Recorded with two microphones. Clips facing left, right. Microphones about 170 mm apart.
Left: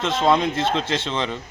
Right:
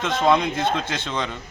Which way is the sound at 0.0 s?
25° left (ahead or behind).